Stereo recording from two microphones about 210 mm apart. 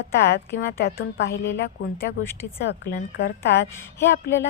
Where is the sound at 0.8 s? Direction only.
55° left (ahead or behind).